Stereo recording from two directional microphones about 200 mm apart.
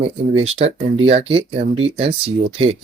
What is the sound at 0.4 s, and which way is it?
Speech, 30° right (ahead or behind).